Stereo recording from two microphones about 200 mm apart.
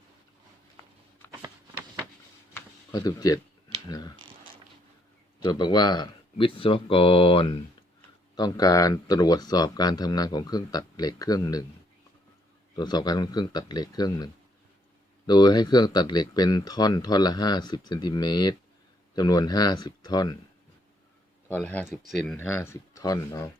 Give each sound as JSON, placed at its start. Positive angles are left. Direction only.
{"t": 2.5, "sound": "a sound", "side_deg": 15}
{"t": 5.4, "sound": "speech", "side_deg": 20}
{"t": 12.7, "sound": "speech", "side_deg": 20}
{"t": 15.3, "sound": "speech", "side_deg": 20}
{"t": 21.5, "sound": "speech", "side_deg": 10}